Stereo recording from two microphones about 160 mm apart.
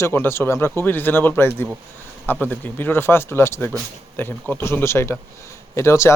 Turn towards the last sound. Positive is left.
turn(degrees=15)  # may be behind; listen again after turning